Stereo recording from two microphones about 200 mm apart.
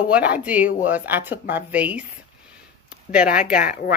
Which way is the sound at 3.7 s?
45° left (ahead or behind).